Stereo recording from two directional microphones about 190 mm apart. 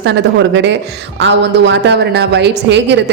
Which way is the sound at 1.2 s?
70° right (ahead or behind).